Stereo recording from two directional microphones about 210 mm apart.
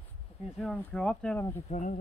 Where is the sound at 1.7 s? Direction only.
35° left (ahead or behind).